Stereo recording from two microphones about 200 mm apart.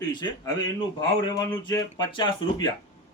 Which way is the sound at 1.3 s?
20° left (ahead or behind).